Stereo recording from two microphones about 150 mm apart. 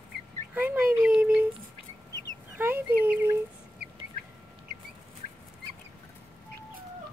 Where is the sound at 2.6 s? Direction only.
15° right (ahead or behind).